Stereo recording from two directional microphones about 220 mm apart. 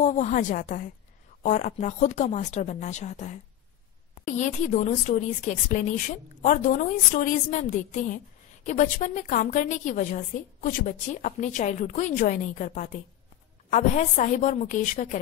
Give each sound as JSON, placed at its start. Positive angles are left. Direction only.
{"t": 0.0, "sound": "a woman's voice", "side_deg": 35}